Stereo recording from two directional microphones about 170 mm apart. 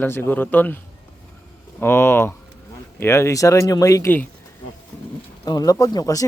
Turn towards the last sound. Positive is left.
turn(degrees=20)  # may be behind; listen again after turning